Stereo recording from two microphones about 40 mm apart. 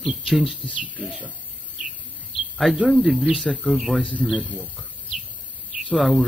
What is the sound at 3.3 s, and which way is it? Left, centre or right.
Speech, right.